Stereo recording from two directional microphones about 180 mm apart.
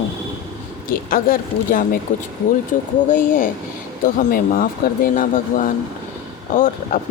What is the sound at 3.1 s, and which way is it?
Speech, 50° left (ahead or behind).